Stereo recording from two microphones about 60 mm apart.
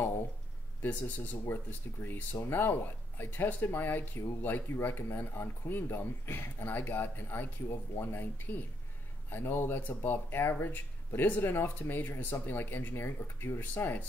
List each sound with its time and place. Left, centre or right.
0.8 s speech: left